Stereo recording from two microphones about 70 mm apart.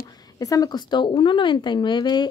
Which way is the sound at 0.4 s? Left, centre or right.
Left.